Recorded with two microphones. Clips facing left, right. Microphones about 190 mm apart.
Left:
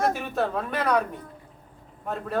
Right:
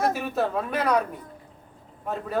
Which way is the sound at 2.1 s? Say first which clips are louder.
Even; centre (ahead or behind).